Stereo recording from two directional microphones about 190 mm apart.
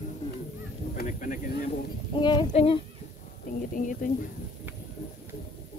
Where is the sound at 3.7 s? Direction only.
45° left (ahead or behind).